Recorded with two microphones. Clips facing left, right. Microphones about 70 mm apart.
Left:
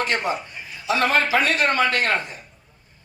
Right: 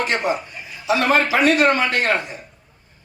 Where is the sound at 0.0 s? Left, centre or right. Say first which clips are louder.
Right 2 dB; right.